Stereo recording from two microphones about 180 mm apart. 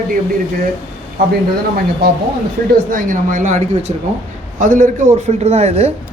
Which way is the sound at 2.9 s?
45° right (ahead or behind).